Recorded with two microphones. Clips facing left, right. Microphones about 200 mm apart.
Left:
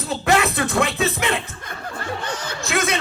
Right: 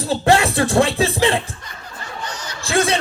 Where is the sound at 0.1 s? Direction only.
30° right (ahead or behind).